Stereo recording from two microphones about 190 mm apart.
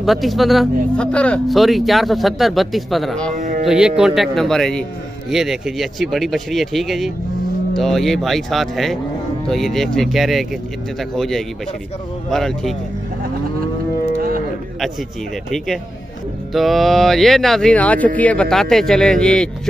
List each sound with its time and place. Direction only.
0.0 s speech: centre (ahead or behind)
3.3 s music: 45° right (ahead or behind)
3.6 s speech: 5° right (ahead or behind)
15.5 s speech: centre (ahead or behind)